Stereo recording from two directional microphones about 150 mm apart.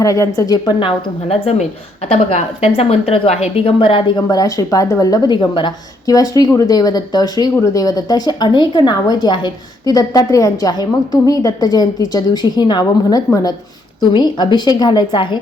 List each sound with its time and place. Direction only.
0.0 s a woman's voice: 20° left (ahead or behind)